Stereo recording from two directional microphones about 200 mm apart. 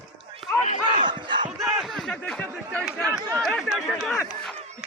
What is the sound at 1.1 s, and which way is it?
Battle cry, 25° right (ahead or behind).